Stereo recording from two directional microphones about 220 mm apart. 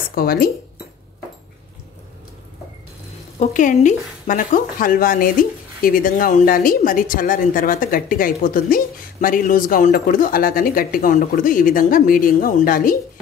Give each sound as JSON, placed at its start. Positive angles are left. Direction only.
{"t": 0.1, "sound": "speech", "side_deg": 40}
{"t": 3.3, "sound": "speech", "side_deg": 35}